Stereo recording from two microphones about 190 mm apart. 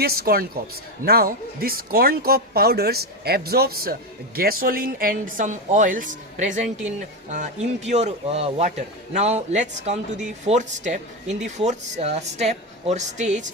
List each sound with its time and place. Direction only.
0.0 s a woman's voice: 55° right (ahead or behind); by 13.4 s 40° right (ahead or behind)